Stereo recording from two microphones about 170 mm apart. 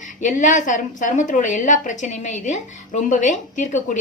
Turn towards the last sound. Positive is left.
turn(degrees=45)  # may be behind; listen again after turning